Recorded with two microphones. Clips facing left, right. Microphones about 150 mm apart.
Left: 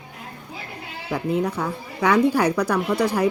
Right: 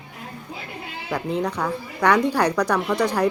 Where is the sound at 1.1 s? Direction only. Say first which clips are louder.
Left 2 dB; 5° left (ahead or behind).